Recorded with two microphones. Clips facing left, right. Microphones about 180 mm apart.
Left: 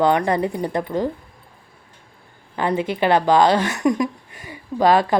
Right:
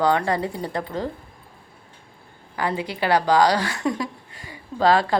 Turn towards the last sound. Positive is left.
turn(degrees=20)  # may be behind; listen again after turning